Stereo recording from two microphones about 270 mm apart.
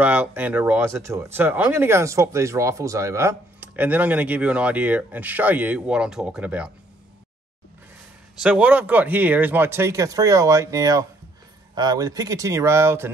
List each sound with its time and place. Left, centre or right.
0.0 s speech: centre
8.4 s speech: centre